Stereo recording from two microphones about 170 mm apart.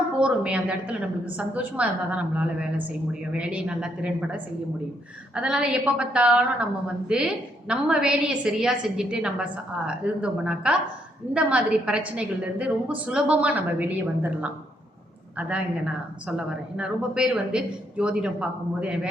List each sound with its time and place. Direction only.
0.2 s a woman's voice: 5° right (ahead or behind)
16.7 s a woman's voice: 5° right (ahead or behind)